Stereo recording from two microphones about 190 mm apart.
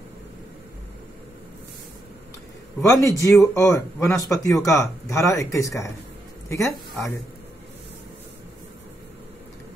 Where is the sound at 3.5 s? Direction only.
15° left (ahead or behind).